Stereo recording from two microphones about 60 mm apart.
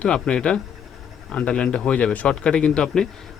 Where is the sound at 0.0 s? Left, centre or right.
Centre.